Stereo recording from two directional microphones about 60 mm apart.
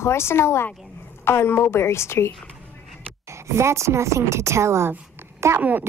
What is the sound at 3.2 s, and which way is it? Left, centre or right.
Speech, right.